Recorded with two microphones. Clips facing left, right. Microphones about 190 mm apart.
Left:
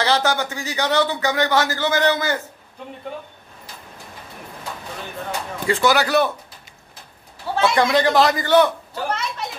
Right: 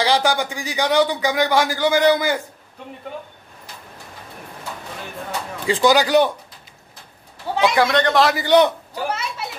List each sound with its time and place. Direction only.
0.0 s a man's voice: 15° right (ahead or behind)
5.7 s a man's voice: 15° right (ahead or behind)
7.7 s a man's voice: centre (ahead or behind)
8.5 s a man's voice: 15° right (ahead or behind)